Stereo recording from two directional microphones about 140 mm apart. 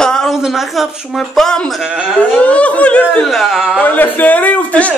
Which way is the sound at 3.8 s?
10° left (ahead or behind).